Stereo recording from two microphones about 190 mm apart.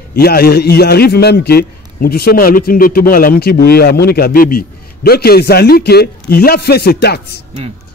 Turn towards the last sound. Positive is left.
turn(degrees=55)  # may be behind; listen again after turning